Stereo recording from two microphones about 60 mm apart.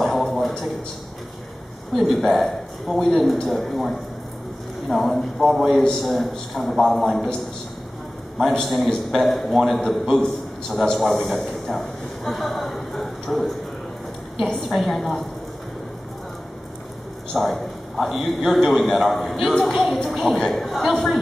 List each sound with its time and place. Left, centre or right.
0.0 s a sound: centre
2.0 s a man's voice: centre
8.5 s a man's voice: centre
17.3 s a man's voice: centre